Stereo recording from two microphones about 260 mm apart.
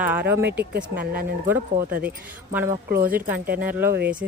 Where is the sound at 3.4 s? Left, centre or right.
Right.